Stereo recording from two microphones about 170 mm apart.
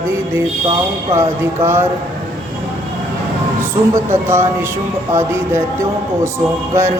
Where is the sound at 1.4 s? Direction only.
15° right (ahead or behind).